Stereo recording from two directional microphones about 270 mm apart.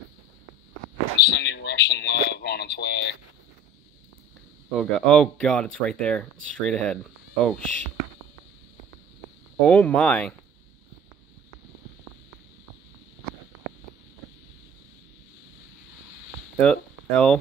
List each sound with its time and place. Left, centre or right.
1.1 s speech: left
4.6 s speech: centre
9.6 s speech: centre
16.5 s speech: centre